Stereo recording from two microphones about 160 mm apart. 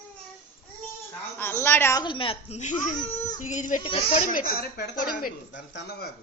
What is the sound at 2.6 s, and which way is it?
Speech, 50° left (ahead or behind).